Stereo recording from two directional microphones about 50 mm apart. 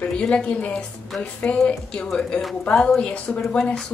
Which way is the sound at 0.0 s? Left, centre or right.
Left.